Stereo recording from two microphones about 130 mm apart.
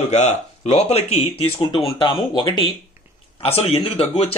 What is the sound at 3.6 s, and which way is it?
Speech, 50° left (ahead or behind).